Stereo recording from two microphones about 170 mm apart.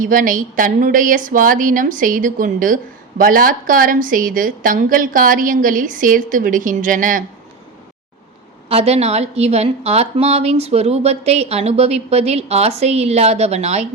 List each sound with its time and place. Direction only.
0.0 s a woman's voice: 55° right (ahead or behind)
8.7 s a woman's voice: 40° right (ahead or behind)